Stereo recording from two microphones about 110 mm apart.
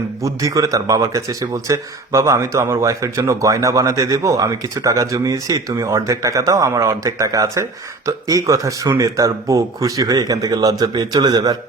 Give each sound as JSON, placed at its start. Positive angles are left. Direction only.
{"t": 0.2, "sound": "speech", "side_deg": -30}